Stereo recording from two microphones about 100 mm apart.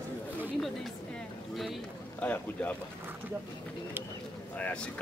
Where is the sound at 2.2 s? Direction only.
15° left (ahead or behind).